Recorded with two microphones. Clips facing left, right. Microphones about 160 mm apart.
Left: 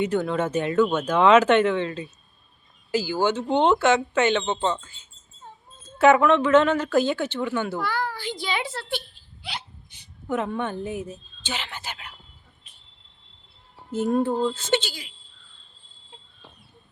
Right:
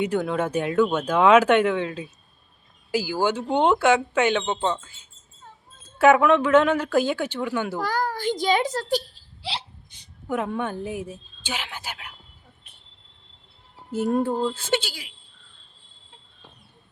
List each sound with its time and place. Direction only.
0.0 s speech: 10° right (ahead or behind)
6.0 s speech: 10° right (ahead or behind)
7.8 s a child's voice: 40° right (ahead or behind)
10.2 s speech: 10° right (ahead or behind)
13.9 s speech: 10° right (ahead or behind)